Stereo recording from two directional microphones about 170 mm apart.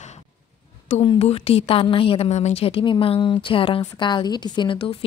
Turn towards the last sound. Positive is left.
turn(degrees=30)  # may be behind; listen again after turning